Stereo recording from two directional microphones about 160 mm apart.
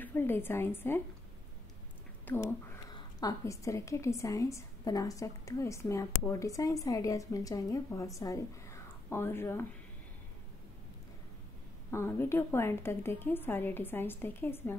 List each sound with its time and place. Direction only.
0.0 s a woman's voice: 15° left (ahead or behind)
2.3 s a woman's voice: 10° left (ahead or behind)
2.9 s a woman's voice: 25° left (ahead or behind)
11.9 s a woman's voice: 15° left (ahead or behind)